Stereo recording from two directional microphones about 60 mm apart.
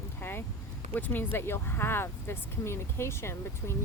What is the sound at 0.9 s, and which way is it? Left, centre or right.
Speech, left.